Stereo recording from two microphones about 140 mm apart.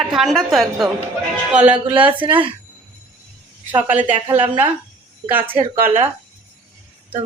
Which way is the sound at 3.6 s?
10° right (ahead or behind).